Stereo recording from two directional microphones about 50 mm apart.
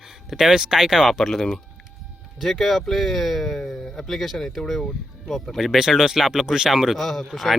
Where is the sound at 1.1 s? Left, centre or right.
Centre.